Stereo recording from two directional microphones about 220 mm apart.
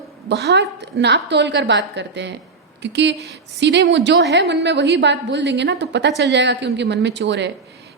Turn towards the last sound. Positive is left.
turn(degrees=-55)  # may be behind; listen again after turning